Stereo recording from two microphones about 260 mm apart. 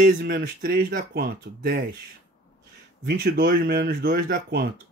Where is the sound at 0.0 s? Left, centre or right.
Right.